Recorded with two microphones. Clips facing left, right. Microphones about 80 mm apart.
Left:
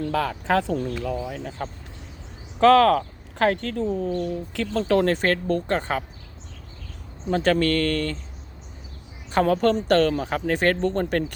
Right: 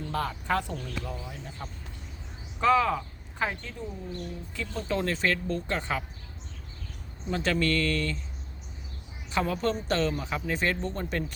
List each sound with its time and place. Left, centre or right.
0.0 s speech: left
2.6 s speech: left
7.3 s speech: left
9.3 s speech: left